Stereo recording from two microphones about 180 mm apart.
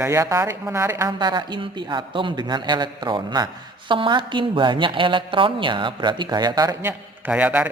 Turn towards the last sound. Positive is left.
turn(degrees=-10)  # may be behind; listen again after turning